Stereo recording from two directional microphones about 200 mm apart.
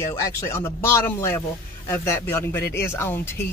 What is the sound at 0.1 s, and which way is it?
Speech, 15° left (ahead or behind).